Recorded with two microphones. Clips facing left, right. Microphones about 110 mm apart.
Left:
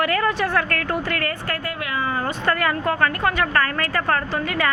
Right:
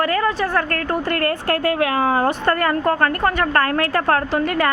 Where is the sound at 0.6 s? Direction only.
35° right (ahead or behind).